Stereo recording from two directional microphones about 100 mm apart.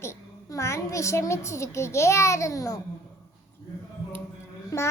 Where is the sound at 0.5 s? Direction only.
30° left (ahead or behind).